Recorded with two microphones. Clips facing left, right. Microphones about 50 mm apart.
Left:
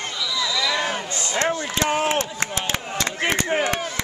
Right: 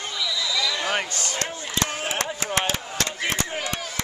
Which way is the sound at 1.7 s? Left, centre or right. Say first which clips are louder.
Left 3 dB; left.